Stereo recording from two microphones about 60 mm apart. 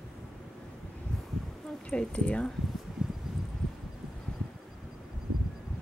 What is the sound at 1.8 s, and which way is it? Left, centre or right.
Speech, centre.